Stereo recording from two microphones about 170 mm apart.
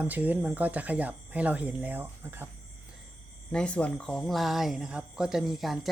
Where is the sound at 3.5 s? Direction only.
5° left (ahead or behind).